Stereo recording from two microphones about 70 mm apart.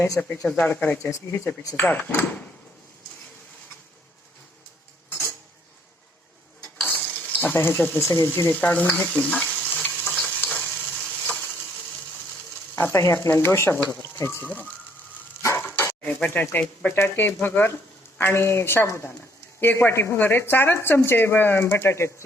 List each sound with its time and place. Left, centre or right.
0.2 s stir: centre
6.8 s stir: left
7.5 s speech: left
8.4 s stir: left
12.9 s speech: left
15.4 s dog: left
16.0 s stir: left
16.9 s speech: left